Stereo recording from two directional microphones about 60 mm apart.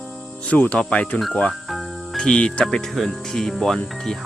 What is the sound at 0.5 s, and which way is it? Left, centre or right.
Speech, left.